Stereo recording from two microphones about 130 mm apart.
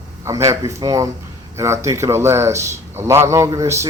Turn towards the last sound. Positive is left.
turn(degrees=-25)  # may be behind; listen again after turning